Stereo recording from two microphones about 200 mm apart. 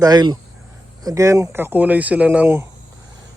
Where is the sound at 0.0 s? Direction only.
20° right (ahead or behind).